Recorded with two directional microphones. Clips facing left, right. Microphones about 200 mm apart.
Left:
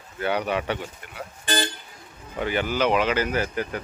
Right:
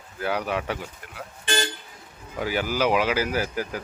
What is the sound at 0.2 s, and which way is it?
Speech, centre (ahead or behind).